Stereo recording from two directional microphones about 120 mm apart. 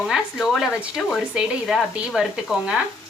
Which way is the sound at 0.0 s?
Centre (ahead or behind).